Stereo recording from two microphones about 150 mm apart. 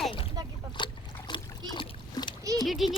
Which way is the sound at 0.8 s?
30° left (ahead or behind).